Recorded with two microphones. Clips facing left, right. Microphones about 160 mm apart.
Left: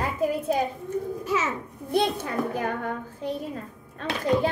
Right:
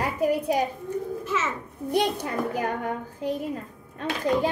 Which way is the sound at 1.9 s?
10° right (ahead or behind).